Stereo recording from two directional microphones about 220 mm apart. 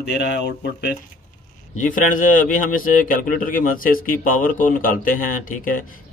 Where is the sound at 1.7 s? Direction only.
35° left (ahead or behind).